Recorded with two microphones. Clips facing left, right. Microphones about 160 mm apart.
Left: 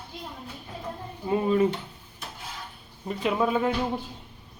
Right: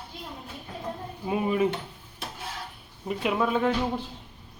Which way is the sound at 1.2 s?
10° right (ahead or behind).